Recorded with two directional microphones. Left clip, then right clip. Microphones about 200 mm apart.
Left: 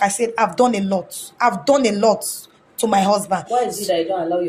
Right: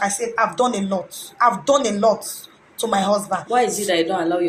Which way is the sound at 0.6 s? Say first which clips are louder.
Left 3 dB; 30° left (ahead or behind).